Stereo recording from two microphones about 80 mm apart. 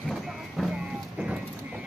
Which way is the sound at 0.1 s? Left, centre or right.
Centre.